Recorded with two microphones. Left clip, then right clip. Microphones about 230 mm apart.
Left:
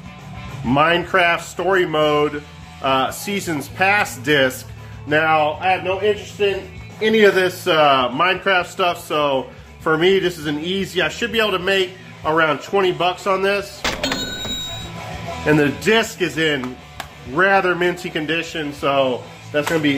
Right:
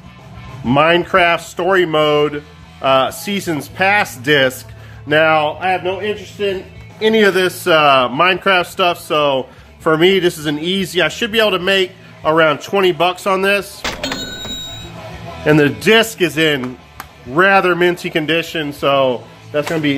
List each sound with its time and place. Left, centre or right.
0.7 s a man's voice: right
13.8 s cash register: centre
15.4 s a man's voice: right